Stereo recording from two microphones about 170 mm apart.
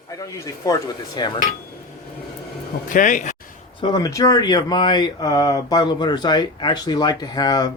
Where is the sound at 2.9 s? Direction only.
50° left (ahead or behind).